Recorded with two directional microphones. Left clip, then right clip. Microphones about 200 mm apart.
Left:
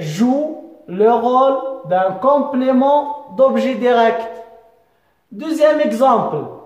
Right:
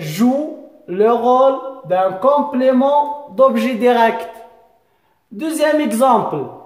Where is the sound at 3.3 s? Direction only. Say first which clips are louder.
Even; 40° right (ahead or behind).